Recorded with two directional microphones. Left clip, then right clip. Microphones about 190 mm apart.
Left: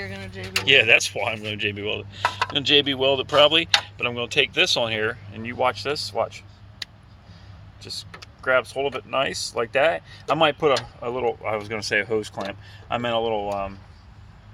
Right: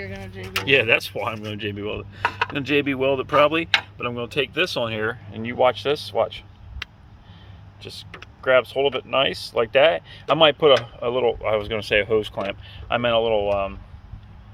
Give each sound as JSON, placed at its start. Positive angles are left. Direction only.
{"t": 0.0, "sound": "a sound", "side_deg": 10}
{"t": 0.6, "sound": "speech", "side_deg": -40}
{"t": 5.3, "sound": "speech", "side_deg": -55}
{"t": 7.8, "sound": "speech", "side_deg": -45}